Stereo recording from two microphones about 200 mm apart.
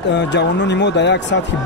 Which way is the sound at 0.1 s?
60° left (ahead or behind).